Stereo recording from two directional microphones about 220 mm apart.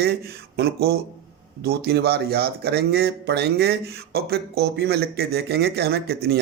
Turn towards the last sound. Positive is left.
turn(degrees=-45)  # may be behind; listen again after turning